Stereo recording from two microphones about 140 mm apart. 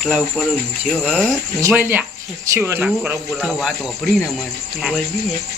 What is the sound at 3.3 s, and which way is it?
Speech, centre (ahead or behind).